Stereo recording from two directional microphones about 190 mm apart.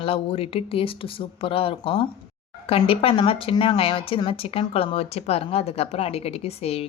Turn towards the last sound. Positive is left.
turn(degrees=35)  # may be behind; listen again after turning